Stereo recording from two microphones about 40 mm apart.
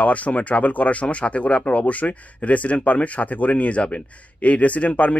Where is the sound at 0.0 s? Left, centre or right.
Left.